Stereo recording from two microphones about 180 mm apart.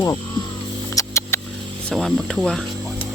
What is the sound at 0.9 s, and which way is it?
Mouse, 15° left (ahead or behind).